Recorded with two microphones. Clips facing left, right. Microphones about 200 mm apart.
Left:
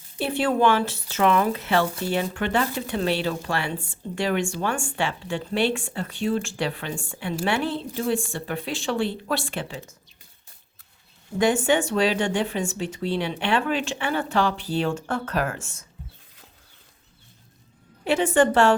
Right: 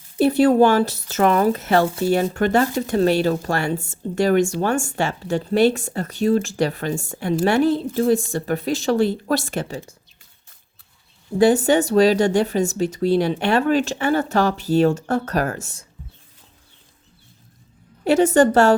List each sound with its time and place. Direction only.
0.2 s speech: 40° right (ahead or behind)
11.3 s speech: 35° right (ahead or behind)
18.0 s speech: 40° right (ahead or behind)